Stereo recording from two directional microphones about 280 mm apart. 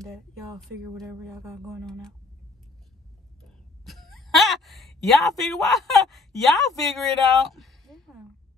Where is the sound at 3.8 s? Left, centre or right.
Centre.